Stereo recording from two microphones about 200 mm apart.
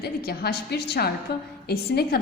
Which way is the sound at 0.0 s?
50° left (ahead or behind).